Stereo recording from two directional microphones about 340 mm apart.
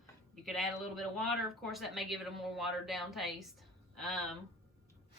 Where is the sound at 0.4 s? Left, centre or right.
Centre.